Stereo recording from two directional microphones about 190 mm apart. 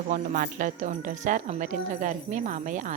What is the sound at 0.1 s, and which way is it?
Speech, 45° right (ahead or behind).